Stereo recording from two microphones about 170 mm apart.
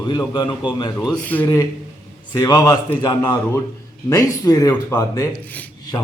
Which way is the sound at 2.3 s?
20° left (ahead or behind).